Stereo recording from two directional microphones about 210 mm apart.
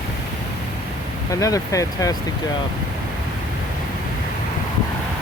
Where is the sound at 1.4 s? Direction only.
15° left (ahead or behind).